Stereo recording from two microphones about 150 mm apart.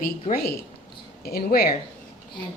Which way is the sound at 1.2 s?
90° left.